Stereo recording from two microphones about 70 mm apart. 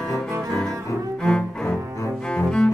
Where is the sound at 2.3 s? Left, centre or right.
Centre.